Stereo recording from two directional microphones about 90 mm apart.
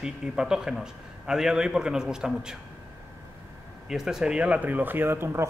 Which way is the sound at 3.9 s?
5° right (ahead or behind).